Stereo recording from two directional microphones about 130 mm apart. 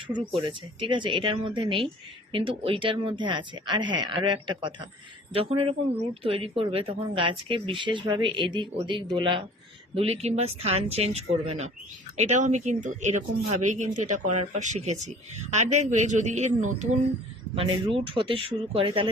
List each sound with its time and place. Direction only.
0.3 s speech: 40° right (ahead or behind); by 17.0 s 65° right (ahead or behind)
17.5 s speech: 45° right (ahead or behind)